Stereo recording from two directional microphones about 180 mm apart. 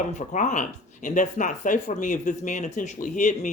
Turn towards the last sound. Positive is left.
turn(degrees=45)  # may be behind; listen again after turning